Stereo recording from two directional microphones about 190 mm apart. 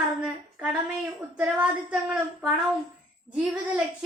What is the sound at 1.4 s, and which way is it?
Speech, 5° right (ahead or behind).